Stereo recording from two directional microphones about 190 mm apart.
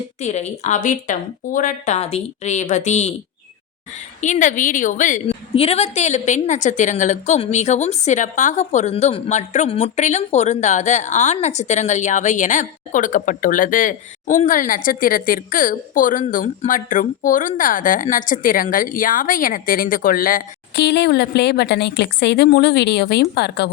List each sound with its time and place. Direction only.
0.2 s a woman's voice: 35° left (ahead or behind)
4.2 s a woman's voice: 40° left (ahead or behind); by 23.6 s 60° left (ahead or behind)